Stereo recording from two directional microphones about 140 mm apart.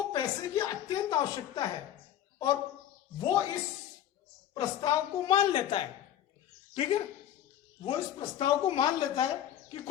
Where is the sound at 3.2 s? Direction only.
35° left (ahead or behind).